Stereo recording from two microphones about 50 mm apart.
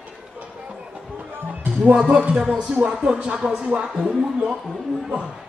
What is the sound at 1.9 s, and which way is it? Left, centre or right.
Speech, right.